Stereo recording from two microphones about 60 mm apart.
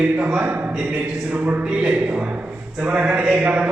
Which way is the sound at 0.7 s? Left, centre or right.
Centre.